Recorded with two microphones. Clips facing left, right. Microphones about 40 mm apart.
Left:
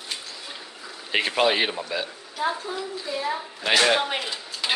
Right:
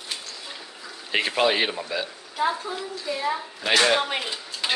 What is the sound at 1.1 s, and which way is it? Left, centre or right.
A woman's voice, centre.